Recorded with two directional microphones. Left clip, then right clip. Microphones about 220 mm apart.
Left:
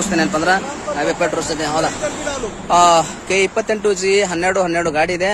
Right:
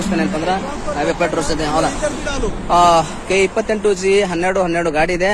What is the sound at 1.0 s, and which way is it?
A man's voice, 10° left (ahead or behind).